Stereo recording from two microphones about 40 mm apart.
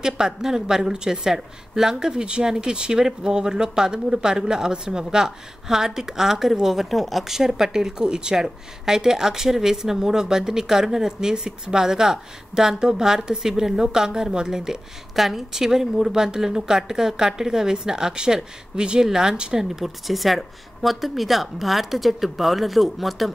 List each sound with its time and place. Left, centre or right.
0.0 s speech: centre
19.6 s speech: centre